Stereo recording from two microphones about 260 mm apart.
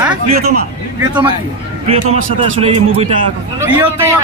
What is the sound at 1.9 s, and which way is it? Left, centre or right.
A man's voice, right.